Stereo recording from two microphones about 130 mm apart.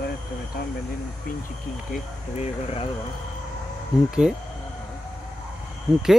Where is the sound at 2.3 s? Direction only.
50° left (ahead or behind).